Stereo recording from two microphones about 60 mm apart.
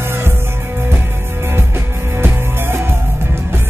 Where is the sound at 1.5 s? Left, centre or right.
Right.